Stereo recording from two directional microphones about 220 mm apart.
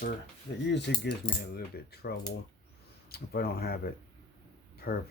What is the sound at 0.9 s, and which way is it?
Speech, 50° left (ahead or behind).